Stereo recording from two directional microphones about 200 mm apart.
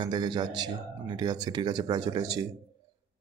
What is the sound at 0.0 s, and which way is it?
Speech, 20° right (ahead or behind).